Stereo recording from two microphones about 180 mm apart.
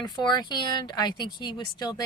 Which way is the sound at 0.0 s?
25° left (ahead or behind).